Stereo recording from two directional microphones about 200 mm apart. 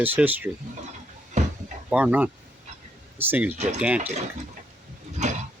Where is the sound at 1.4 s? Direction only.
35° right (ahead or behind).